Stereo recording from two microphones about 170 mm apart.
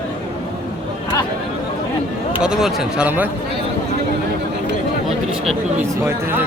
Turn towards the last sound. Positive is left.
turn(degrees=-15)  # may be behind; listen again after turning